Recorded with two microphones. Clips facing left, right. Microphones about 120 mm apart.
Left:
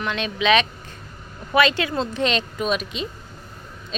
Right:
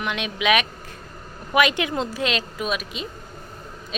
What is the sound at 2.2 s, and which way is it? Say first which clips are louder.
Speech: left 3 dB; 5° right (ahead or behind).